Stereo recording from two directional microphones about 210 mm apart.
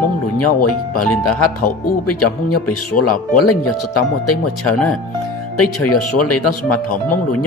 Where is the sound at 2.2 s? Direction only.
90° left.